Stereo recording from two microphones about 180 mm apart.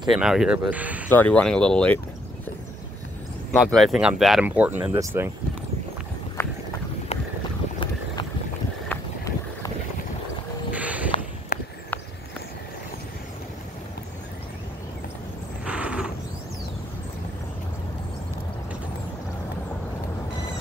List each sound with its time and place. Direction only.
0.1 s speech: centre (ahead or behind)
1.0 s speech: 10° left (ahead or behind)
3.5 s speech: centre (ahead or behind)
6.4 s horse: 10° left (ahead or behind)
8.8 s boat: 15° left (ahead or behind)
10.7 s walk: 10° right (ahead or behind)
11.5 s a sound: 55° left (ahead or behind)
15.6 s a sound: 5° right (ahead or behind)